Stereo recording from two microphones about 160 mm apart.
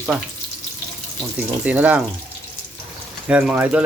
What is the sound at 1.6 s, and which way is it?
Speech, 10° right (ahead or behind).